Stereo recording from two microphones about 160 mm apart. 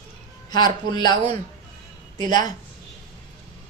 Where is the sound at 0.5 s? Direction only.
25° left (ahead or behind).